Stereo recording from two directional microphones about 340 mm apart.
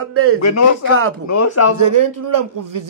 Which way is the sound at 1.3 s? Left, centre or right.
Left.